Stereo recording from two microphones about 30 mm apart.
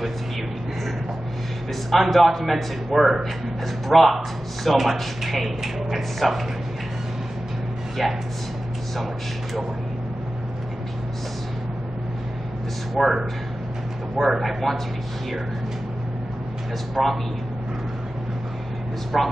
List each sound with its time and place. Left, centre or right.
1.9 s a man's voice: centre
8.0 s a man's voice: centre
13.0 s a man's voice: centre
14.2 s a man's voice: centre
16.9 s a man's voice: centre
19.1 s a man's voice: centre